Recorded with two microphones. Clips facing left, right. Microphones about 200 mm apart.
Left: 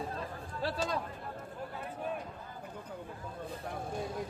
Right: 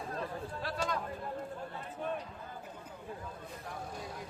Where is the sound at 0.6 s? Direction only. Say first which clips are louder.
Left 3 dB; 30° left (ahead or behind).